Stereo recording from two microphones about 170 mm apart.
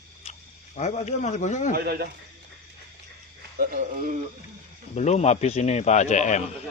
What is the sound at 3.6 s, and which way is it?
Speech, 55° right (ahead or behind).